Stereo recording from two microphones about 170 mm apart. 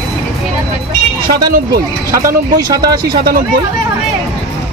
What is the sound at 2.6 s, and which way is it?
Speech, 20° right (ahead or behind).